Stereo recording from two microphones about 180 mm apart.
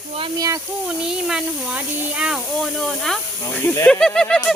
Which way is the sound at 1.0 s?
5° right (ahead or behind).